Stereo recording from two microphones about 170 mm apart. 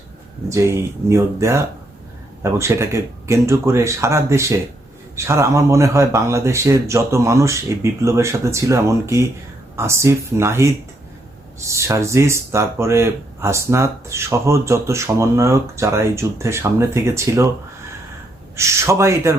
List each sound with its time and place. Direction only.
0.4 s speech: 15° right (ahead or behind)
11.7 s speech: 15° right (ahead or behind)
18.5 s speech: 15° right (ahead or behind)